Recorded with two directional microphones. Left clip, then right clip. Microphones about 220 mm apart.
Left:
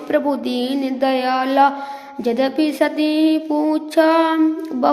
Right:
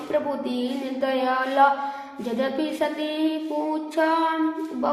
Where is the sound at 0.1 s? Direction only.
45° left (ahead or behind).